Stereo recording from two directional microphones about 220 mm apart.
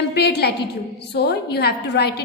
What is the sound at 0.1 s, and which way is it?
A woman's voice, 50° left (ahead or behind).